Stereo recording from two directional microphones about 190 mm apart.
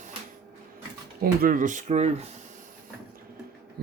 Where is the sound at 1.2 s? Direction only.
50° right (ahead or behind).